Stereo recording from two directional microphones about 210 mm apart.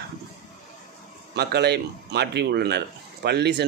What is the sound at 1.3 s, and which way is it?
Speech, 50° right (ahead or behind).